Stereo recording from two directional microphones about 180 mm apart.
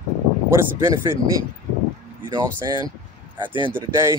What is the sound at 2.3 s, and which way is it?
Speech, 20° right (ahead or behind).